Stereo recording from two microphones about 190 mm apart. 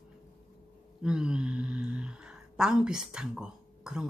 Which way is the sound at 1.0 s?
5° right (ahead or behind).